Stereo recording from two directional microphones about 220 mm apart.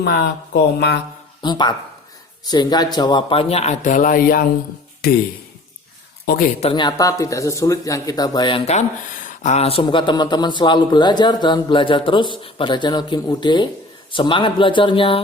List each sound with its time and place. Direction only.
0.0 s speech: 50° left (ahead or behind)
1.4 s speech: 20° left (ahead or behind); by 4.4 s 40° left (ahead or behind)
6.2 s speech: 40° left (ahead or behind)
6.6 s speech: 25° left (ahead or behind)